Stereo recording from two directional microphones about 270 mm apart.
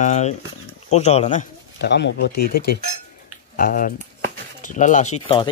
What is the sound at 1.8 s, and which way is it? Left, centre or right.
Speech, left.